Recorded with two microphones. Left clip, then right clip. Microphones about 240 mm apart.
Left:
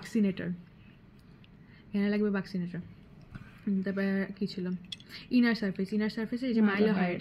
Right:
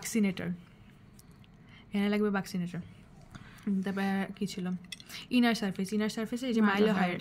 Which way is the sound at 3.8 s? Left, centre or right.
Right.